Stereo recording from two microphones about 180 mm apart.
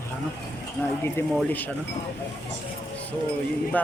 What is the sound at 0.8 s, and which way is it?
Speech, 5° right (ahead or behind).